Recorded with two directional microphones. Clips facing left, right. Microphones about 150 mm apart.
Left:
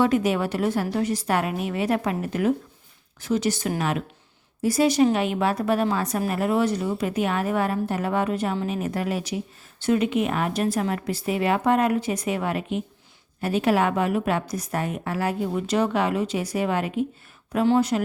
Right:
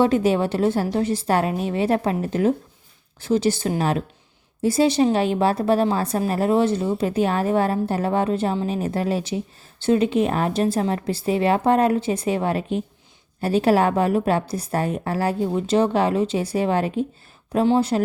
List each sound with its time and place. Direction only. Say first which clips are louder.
0.0 s a woman's voice: right 3 dB; 30° right (ahead or behind)